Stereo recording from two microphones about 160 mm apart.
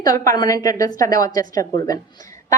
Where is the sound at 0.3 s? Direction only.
20° left (ahead or behind).